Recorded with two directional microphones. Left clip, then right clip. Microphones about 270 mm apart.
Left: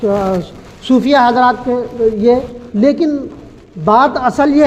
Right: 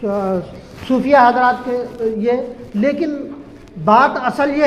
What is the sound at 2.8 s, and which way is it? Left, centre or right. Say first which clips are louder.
Speech: left 5 dB; left.